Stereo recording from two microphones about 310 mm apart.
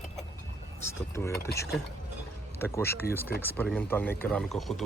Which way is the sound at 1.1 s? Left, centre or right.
Centre.